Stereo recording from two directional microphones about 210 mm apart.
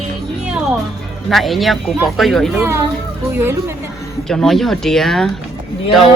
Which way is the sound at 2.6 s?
10° right (ahead or behind).